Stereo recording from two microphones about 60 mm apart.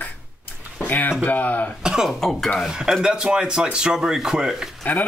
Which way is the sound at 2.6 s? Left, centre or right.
Centre.